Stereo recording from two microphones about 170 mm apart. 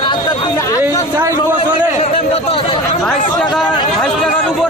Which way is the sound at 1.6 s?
35° left (ahead or behind).